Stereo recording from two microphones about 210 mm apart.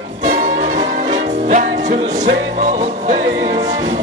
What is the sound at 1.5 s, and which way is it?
Music, 35° right (ahead or behind).